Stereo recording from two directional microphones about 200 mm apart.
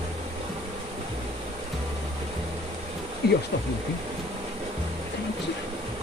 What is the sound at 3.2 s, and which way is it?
Speech, 55° left (ahead or behind).